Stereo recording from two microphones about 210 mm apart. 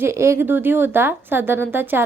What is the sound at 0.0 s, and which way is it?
A woman's voice, 15° right (ahead or behind).